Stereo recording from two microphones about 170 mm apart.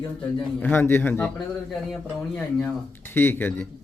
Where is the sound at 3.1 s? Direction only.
15° left (ahead or behind).